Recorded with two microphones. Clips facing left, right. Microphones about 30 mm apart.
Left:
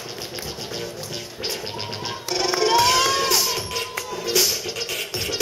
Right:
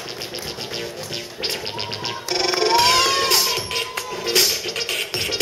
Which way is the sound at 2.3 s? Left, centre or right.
Right.